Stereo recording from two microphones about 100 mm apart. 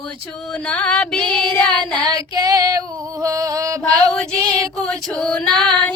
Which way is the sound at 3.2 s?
35° right (ahead or behind).